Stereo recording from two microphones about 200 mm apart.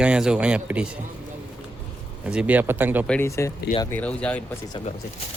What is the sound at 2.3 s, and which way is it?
Speech, 5° right (ahead or behind).